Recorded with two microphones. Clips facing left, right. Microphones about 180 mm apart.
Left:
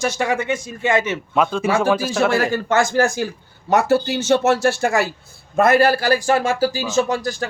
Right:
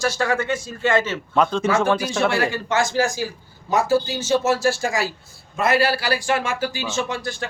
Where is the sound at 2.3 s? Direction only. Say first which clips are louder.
Left 4 dB; 45° left (ahead or behind).